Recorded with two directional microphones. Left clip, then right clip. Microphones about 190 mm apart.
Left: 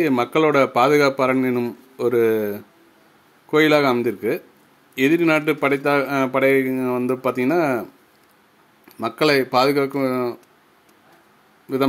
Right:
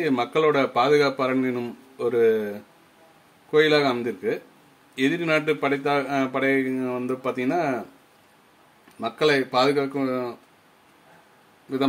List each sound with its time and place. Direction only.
0.0 s speech: 30° left (ahead or behind)
9.0 s speech: 35° left (ahead or behind)